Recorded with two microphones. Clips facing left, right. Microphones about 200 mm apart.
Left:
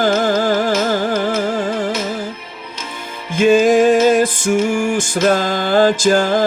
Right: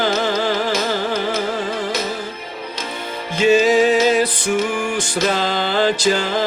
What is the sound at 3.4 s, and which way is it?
Music, 50° left (ahead or behind).